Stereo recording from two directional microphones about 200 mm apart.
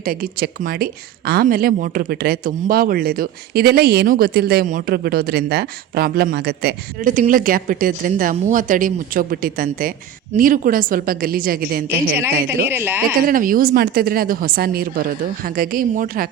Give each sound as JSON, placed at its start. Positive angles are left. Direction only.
{"t": 0.0, "sound": "speech", "side_deg": -45}
{"t": 12.7, "sound": "speech", "side_deg": -10}
{"t": 13.2, "sound": "speech", "side_deg": -45}